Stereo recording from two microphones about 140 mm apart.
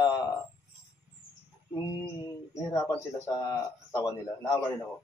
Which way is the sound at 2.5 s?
25° left (ahead or behind).